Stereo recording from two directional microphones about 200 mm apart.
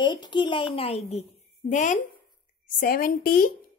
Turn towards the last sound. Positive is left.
turn(degrees=45)  # may be behind; listen again after turning